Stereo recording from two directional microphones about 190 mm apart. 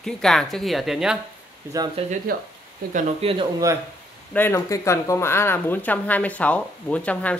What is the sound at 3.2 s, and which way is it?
Speech, 30° right (ahead or behind).